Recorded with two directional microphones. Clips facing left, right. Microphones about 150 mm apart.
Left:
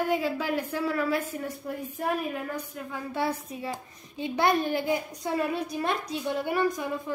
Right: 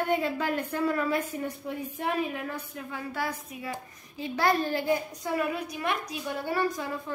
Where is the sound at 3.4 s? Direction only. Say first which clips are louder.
Left 2 dB; 30° left (ahead or behind).